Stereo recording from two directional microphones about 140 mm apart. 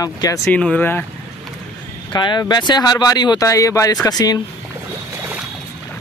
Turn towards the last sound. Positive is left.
turn(degrees=25)  # may be behind; listen again after turning